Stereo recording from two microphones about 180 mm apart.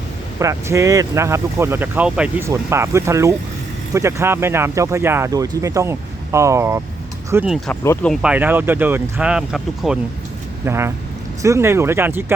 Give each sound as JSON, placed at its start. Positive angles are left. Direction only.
{"t": 0.3, "sound": "speech", "side_deg": -15}
{"t": 7.7, "sound": "speech", "side_deg": 10}
{"t": 8.2, "sound": "speech", "side_deg": -10}
{"t": 10.7, "sound": "speech", "side_deg": -15}